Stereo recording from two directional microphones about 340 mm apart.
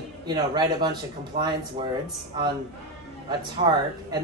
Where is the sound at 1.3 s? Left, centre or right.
Right.